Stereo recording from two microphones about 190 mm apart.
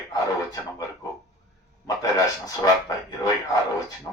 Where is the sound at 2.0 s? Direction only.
20° left (ahead or behind).